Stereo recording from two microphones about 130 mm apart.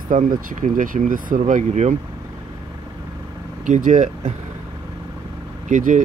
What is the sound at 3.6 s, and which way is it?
Speech, 80° right.